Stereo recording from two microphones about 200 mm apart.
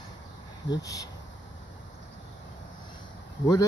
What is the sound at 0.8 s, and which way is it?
Speech, 15° left (ahead or behind).